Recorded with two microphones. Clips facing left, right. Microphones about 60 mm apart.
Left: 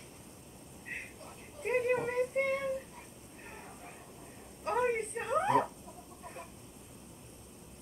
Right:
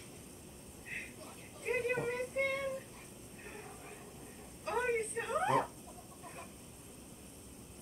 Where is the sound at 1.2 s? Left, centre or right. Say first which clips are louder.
Left 5 dB; left.